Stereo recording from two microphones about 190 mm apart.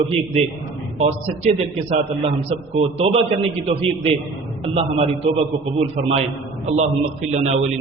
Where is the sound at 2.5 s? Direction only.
35° right (ahead or behind).